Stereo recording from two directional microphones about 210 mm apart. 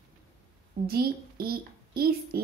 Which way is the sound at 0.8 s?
45° right (ahead or behind).